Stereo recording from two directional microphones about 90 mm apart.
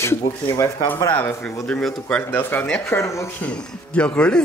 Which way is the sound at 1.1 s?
25° left (ahead or behind).